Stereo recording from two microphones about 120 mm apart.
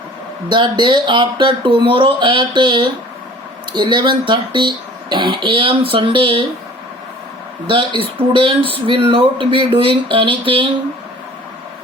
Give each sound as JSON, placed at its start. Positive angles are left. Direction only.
{"t": 0.5, "sound": "speech", "side_deg": -40}
{"t": 7.7, "sound": "speech", "side_deg": -45}